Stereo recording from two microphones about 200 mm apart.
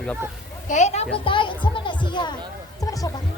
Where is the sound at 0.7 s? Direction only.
35° left (ahead or behind).